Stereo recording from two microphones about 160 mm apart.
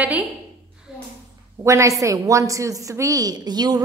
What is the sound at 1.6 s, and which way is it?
A woman's voice, 20° right (ahead or behind).